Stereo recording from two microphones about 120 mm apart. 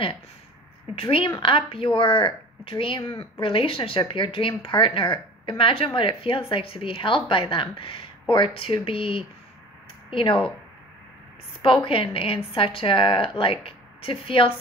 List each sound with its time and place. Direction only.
0.9 s speech: 50° left (ahead or behind)
11.6 s speech: 45° left (ahead or behind)